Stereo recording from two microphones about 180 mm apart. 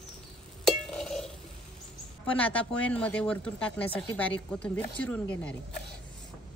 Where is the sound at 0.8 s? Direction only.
5° left (ahead or behind).